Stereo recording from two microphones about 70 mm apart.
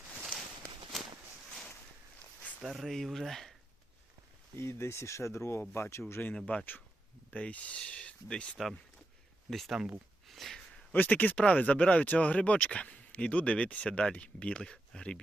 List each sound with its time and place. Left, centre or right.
0.9 s a sound: centre
2.6 s speech: centre
4.5 s speech: left
6.3 s speech: centre
9.5 s speech: centre
10.2 s sniff: centre
10.9 s speech: left